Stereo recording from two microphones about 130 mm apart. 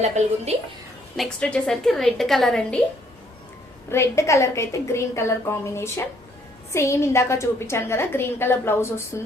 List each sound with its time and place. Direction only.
0.0 s a woman's voice: 60° right (ahead or behind)
1.1 s a woman's voice: 5° left (ahead or behind)
3.9 s a woman's voice: 20° left (ahead or behind)